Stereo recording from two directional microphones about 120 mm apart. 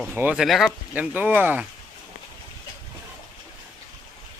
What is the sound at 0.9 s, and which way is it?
Speech, 15° right (ahead or behind).